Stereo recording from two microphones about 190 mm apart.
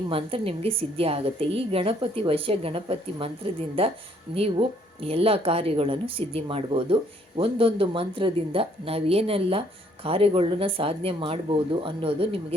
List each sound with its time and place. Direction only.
0.1 s a woman's voice: 30° right (ahead or behind)